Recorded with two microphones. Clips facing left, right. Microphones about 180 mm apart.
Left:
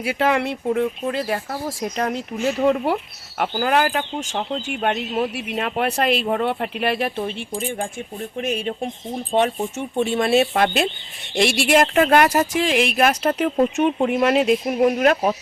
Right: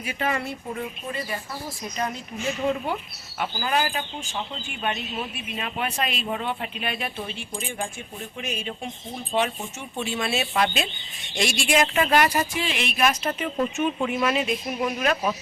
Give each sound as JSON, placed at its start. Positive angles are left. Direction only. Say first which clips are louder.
{"t": 0.0, "sound": "speech", "louder": "left 8 dB", "side_deg": 90}
{"t": 4.6, "sound": "speech", "louder": "left 7 dB", "side_deg": 70}
{"t": 8.4, "sound": "speech", "louder": "left 8 dB", "side_deg": 55}
{"t": 12.5, "sound": "speech", "louder": "left 8 dB", "side_deg": 75}
{"t": 13.7, "sound": "speech", "louder": "left 6 dB", "side_deg": 60}
{"t": 14.8, "sound": "speech", "louder": "left 7 dB", "side_deg": 55}